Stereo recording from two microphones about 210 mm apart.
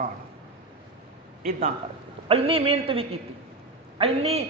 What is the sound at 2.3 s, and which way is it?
A man's voice, 25° right (ahead or behind).